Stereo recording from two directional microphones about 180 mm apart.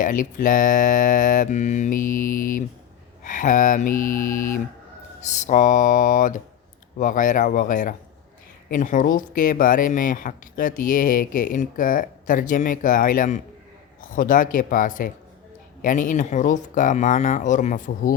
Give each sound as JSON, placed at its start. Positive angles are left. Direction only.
{"t": 0.0, "sound": "speech", "side_deg": 50}